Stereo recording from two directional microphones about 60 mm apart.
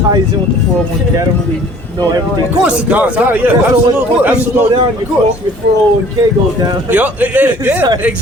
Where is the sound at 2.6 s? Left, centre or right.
Right.